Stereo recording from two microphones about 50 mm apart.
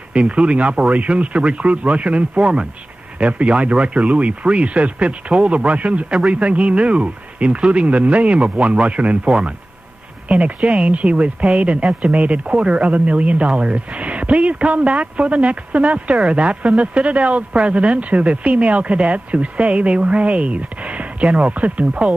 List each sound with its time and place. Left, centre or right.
0.4 s speech: right